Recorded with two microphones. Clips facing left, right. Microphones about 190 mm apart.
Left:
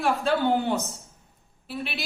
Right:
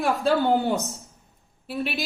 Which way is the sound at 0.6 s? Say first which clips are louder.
Right 2 dB; 35° right (ahead or behind).